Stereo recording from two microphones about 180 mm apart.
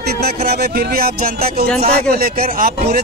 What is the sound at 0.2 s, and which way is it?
Speech, 60° right (ahead or behind).